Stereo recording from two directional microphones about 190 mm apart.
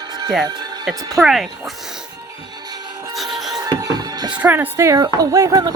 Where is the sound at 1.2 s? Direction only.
Centre (ahead or behind).